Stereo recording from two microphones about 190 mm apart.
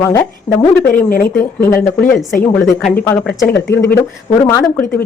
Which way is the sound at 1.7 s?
45° left (ahead or behind).